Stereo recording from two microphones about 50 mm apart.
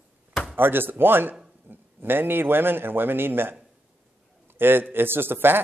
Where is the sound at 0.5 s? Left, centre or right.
Right.